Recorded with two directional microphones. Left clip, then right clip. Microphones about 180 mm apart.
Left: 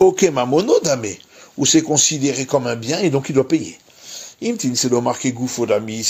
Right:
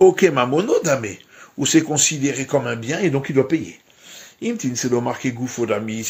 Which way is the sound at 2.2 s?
50° left (ahead or behind).